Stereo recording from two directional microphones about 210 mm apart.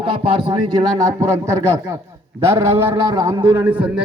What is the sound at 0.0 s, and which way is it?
A man's voice, 25° right (ahead or behind).